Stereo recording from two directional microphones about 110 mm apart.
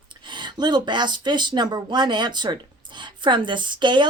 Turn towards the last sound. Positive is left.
turn(degrees=-45)  # may be behind; listen again after turning